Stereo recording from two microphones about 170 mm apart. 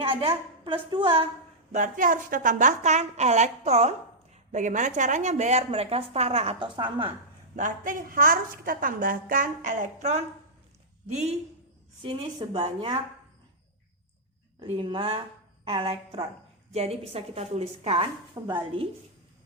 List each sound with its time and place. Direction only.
0.0 s a woman's voice: 35° right (ahead or behind)
1.7 s a woman's voice: 50° right (ahead or behind); by 7.1 s 30° right (ahead or behind)
7.5 s a woman's voice: 50° right (ahead or behind); by 13.0 s 35° right (ahead or behind)
14.6 s a woman's voice: 30° right (ahead or behind)